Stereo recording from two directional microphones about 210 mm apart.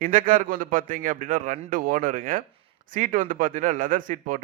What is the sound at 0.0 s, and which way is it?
Speech, 40° right (ahead or behind).